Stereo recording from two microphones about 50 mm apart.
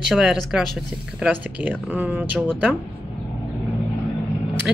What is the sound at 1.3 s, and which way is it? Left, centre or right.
Speech, right.